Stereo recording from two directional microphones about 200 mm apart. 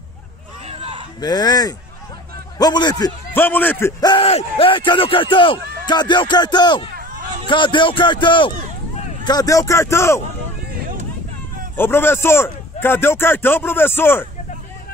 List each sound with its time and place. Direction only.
0.7 s a sound: 30° right (ahead or behind)
1.2 s a man's voice: 20° left (ahead or behind)
11.7 s a man's voice: 10° left (ahead or behind)